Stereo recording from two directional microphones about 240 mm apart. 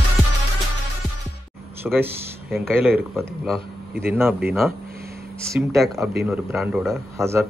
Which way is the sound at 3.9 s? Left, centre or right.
Right.